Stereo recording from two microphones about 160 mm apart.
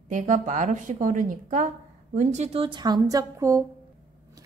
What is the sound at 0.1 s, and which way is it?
A woman's voice, 50° right (ahead or behind).